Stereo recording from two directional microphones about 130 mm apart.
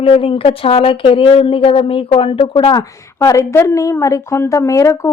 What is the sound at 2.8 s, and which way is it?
A woman's voice, 25° left (ahead or behind).